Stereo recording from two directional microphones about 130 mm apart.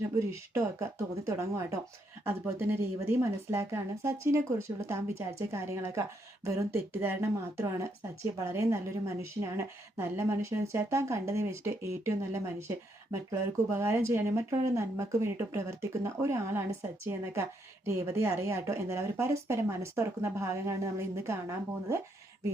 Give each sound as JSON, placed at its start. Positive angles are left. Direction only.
{"t": 0.2, "sound": "a woman's voice", "side_deg": -25}